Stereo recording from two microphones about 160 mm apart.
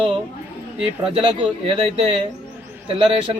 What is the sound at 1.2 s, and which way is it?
A man's voice, 35° right (ahead or behind).